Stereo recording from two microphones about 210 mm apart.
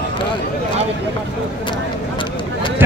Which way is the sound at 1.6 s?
20° left (ahead or behind).